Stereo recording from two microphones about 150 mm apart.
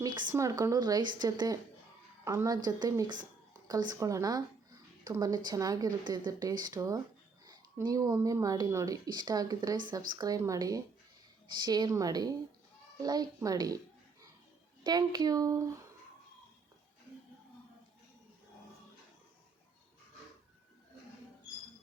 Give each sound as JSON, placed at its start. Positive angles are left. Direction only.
{"t": 0.0, "sound": "speech", "side_deg": -30}
{"t": 14.8, "sound": "speech", "side_deg": -25}